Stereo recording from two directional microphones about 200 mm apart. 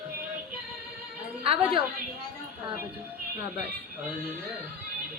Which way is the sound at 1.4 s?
25° right (ahead or behind).